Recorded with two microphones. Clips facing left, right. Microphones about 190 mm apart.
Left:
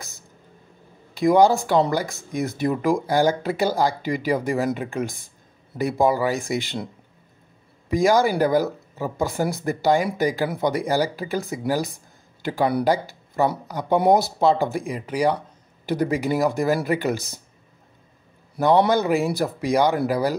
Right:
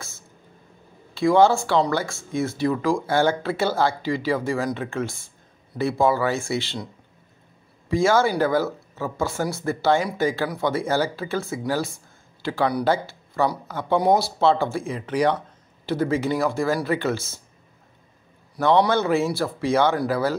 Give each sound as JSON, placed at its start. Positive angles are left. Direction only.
{"t": 1.1, "sound": "speech", "side_deg": 15}
{"t": 7.9, "sound": "speech", "side_deg": 15}
{"t": 18.8, "sound": "speech", "side_deg": 15}